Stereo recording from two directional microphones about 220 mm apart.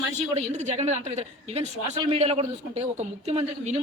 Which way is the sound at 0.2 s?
30° right (ahead or behind).